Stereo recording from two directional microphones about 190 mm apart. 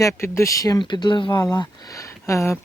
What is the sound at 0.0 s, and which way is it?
Speech, 15° left (ahead or behind).